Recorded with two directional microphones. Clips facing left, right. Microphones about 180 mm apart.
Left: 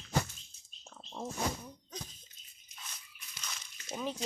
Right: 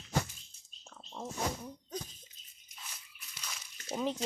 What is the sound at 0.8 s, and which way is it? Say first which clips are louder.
Pig: left 1 dB; 5° left (ahead or behind).